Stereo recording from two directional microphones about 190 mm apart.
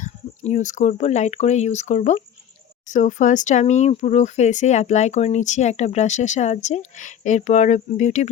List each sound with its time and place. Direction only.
0.0 s speech: 40° left (ahead or behind)